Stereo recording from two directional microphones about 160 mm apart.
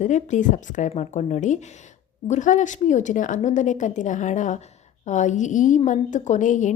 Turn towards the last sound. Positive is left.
turn(degrees=50)  # may be behind; listen again after turning